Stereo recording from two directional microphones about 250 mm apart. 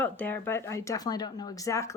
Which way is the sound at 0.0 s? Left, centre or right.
Centre.